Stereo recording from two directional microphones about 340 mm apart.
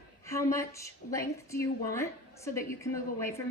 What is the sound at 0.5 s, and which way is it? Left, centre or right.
A woman's voice, centre.